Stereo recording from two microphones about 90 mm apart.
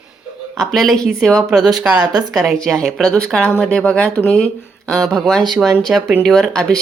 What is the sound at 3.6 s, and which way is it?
A woman's voice, 10° left (ahead or behind).